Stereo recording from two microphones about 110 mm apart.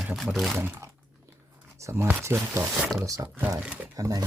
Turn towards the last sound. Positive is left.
turn(degrees=-30)  # may be behind; listen again after turning